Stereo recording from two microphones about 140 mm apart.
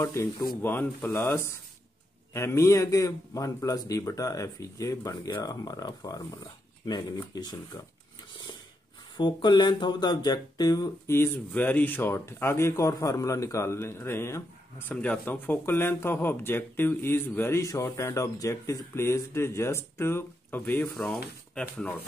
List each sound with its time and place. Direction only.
0.0 s a man's voice: 25° left (ahead or behind)
2.3 s a man's voice: 20° left (ahead or behind)
9.1 s speech: 35° left (ahead or behind)
11.1 s speech: 15° left (ahead or behind)